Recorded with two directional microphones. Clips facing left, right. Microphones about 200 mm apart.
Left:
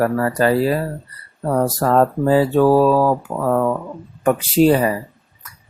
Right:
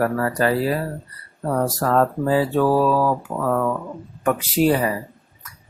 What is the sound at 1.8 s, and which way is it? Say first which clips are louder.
Speech: left 3 dB; 30° left (ahead or behind).